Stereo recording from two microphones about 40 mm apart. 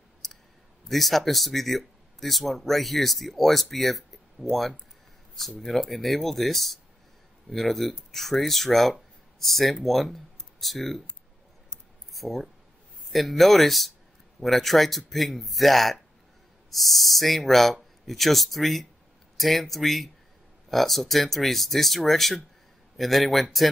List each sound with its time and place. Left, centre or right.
0.2 s clicking: centre
0.8 s speech: centre
12.1 s a sound: centre
13.1 s speech: centre